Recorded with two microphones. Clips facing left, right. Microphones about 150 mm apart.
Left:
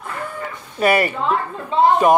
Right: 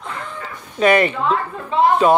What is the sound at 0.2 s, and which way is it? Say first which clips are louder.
Chicken: left 3 dB; 10° left (ahead or behind).